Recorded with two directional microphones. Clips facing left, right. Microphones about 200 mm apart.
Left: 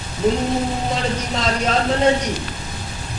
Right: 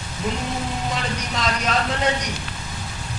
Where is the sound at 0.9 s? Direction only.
30° left (ahead or behind).